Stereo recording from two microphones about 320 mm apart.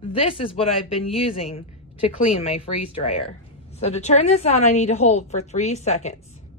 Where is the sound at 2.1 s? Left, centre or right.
Centre.